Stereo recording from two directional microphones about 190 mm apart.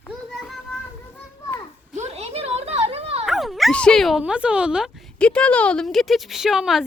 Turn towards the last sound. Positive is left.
turn(degrees=0)  # may be behind; listen again after turning